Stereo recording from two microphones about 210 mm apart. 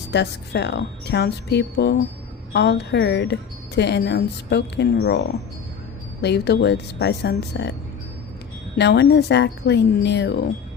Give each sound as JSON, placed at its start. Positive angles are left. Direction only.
{"t": 0.1, "sound": "a woman's voice", "side_deg": 55}
{"t": 6.2, "sound": "speech", "side_deg": 55}
{"t": 8.8, "sound": "speech", "side_deg": 55}